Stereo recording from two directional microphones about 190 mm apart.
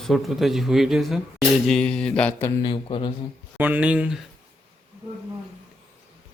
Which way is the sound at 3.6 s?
10° right (ahead or behind).